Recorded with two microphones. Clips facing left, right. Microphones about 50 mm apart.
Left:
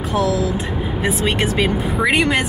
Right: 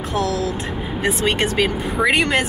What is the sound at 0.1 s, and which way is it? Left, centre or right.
Speech, centre.